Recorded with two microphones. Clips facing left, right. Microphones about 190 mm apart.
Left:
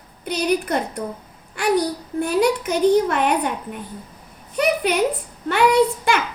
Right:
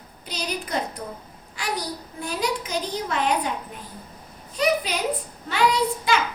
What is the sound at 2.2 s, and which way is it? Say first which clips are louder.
A woman's voice: left 9 dB; 60° left (ahead or behind).